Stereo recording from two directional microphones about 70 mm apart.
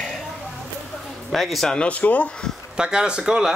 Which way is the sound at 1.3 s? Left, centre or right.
Centre.